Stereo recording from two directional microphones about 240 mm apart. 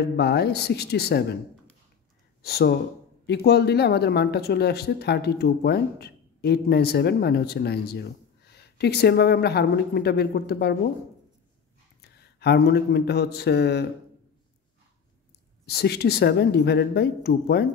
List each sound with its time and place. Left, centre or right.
0.2 s speech: left
2.4 s speech: left
12.0 s speech: left
15.6 s speech: left